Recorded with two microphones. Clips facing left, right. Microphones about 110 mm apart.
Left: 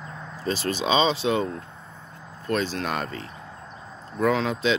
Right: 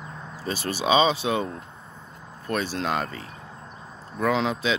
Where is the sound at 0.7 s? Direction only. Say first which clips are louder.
Right 2 dB; 10° right (ahead or behind).